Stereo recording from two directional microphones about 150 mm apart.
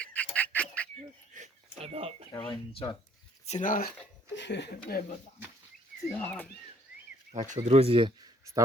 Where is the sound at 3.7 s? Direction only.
80° left.